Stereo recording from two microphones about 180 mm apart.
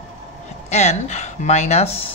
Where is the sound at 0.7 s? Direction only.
40° left (ahead or behind).